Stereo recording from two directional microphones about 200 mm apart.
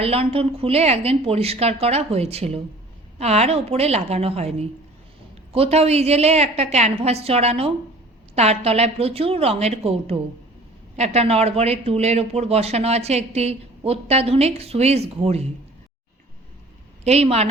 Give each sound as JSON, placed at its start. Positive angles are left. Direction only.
{"t": 0.0, "sound": "a woman's voice", "side_deg": -30}
{"t": 17.0, "sound": "speech", "side_deg": -30}